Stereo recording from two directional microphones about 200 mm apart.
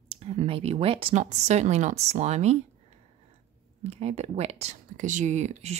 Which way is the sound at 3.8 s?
30° right (ahead or behind).